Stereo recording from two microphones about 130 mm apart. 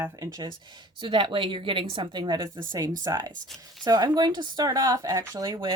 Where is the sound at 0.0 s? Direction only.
25° right (ahead or behind).